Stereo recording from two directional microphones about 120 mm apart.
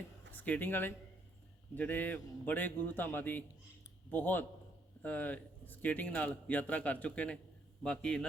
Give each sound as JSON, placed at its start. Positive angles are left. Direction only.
{"t": 0.3, "sound": "a man's voice", "side_deg": 15}